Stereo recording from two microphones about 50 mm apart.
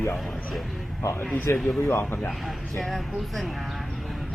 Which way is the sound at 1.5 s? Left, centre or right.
Centre.